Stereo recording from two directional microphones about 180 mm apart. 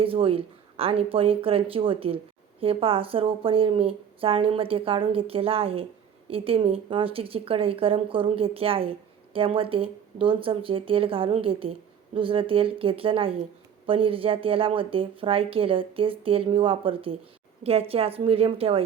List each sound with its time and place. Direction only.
0.0 s speech: 30° right (ahead or behind)